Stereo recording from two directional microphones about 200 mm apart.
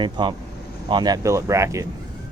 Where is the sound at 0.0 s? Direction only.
25° right (ahead or behind).